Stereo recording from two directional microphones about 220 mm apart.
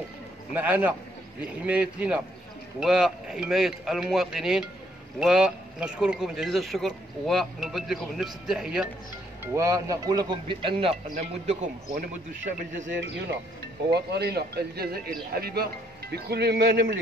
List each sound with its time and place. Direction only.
0.5 s speech: 10° right (ahead or behind)
9.4 s speech: 15° right (ahead or behind)
11.1 s a man's voice: 35° right (ahead or behind)
13.8 s speech: 50° right (ahead or behind)